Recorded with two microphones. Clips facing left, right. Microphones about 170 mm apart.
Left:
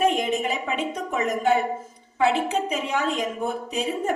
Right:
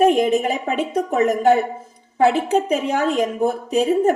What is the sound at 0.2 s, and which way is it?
A woman's voice, 40° right (ahead or behind).